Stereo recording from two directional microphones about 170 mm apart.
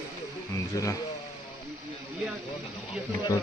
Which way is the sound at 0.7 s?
20° left (ahead or behind).